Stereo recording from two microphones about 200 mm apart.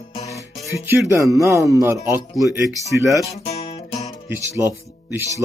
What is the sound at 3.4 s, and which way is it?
Guitar, 30° left (ahead or behind).